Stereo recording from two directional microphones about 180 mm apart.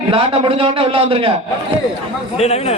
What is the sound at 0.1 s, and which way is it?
A man's voice, 30° right (ahead or behind).